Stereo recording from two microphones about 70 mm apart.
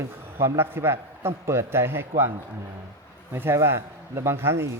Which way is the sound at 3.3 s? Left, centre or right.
Right.